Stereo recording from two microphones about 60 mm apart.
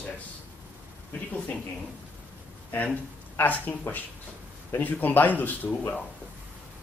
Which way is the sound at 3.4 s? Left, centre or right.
Left.